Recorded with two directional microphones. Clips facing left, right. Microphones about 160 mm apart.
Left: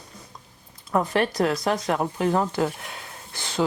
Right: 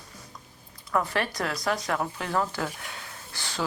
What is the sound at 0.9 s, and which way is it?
Speech, 20° left (ahead or behind).